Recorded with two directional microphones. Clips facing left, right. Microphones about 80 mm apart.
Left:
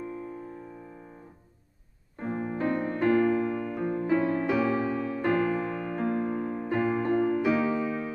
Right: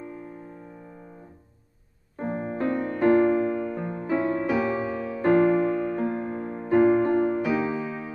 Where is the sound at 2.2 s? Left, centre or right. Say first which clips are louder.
Right 2 dB; right.